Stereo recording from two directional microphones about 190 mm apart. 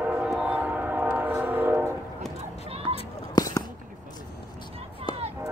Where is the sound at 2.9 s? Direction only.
20° left (ahead or behind).